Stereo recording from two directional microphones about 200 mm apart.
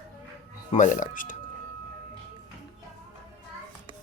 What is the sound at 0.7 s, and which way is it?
Speech, 40° left (ahead or behind).